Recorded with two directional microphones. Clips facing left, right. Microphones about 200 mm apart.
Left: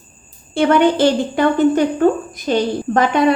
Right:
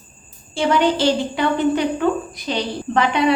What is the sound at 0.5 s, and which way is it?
A woman's voice, 55° left (ahead or behind).